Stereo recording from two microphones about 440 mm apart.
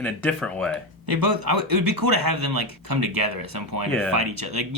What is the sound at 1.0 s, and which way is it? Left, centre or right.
Speech, right.